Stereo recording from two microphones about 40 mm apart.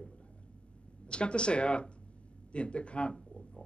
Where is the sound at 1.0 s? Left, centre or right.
Left.